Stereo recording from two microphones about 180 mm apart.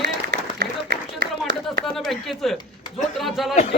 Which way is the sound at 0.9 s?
70° right (ahead or behind).